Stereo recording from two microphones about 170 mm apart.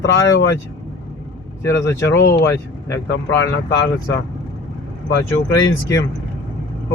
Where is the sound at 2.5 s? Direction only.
15° left (ahead or behind).